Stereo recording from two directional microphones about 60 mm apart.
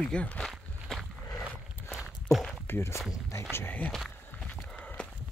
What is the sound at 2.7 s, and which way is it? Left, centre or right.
Speech, left.